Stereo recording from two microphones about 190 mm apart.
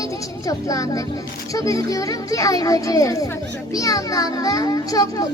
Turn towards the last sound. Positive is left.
turn(degrees=20)  # may be behind; listen again after turning